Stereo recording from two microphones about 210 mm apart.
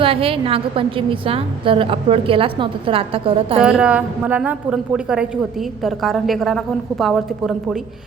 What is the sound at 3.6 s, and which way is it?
A woman's voice, 5° right (ahead or behind).